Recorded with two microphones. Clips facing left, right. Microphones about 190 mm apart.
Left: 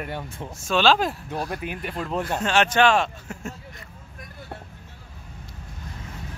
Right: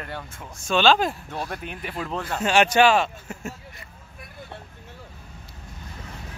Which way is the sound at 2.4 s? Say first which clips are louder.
Right 2 dB; 10° right (ahead or behind).